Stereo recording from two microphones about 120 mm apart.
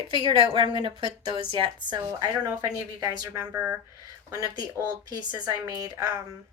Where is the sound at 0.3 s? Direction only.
40° right (ahead or behind).